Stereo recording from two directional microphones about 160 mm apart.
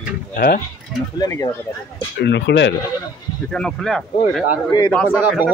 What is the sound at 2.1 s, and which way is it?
Speech, 90° left.